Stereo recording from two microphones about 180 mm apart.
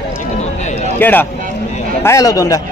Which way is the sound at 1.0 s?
10° left (ahead or behind).